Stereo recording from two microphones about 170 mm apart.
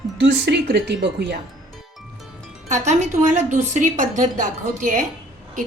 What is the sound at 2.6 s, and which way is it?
A woman's voice, 45° right (ahead or behind).